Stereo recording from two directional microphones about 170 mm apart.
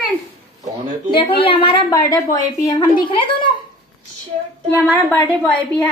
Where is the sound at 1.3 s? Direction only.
30° left (ahead or behind).